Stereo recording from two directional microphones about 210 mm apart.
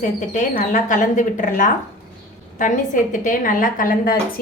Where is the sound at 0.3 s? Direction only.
40° left (ahead or behind).